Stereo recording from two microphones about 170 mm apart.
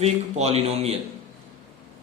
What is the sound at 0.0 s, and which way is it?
Speech, 40° right (ahead or behind).